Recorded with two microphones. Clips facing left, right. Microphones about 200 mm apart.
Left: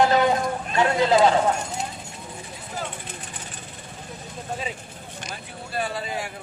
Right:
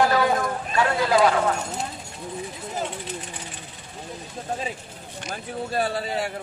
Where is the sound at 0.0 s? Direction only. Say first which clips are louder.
Left 1 dB; 20° left (ahead or behind).